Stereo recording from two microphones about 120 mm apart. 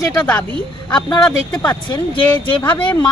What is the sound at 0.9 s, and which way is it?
Speech, 35° left (ahead or behind).